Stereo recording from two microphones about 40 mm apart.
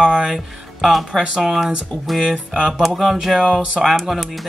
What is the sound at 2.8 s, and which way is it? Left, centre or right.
Speech, centre.